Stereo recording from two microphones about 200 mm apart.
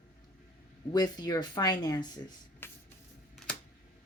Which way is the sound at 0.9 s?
20° left (ahead or behind).